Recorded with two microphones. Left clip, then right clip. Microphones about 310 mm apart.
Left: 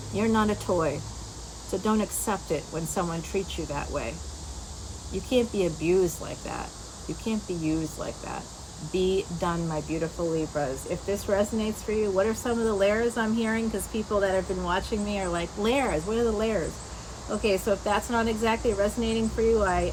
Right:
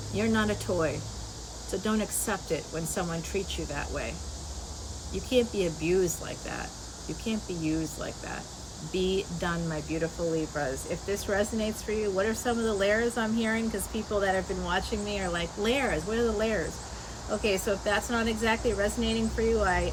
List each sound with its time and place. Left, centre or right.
0.2 s speech: centre
5.1 s speech: centre